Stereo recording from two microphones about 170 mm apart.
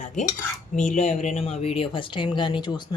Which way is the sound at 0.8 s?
45° left (ahead or behind).